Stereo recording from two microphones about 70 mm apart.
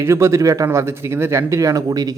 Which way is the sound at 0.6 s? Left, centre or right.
Right.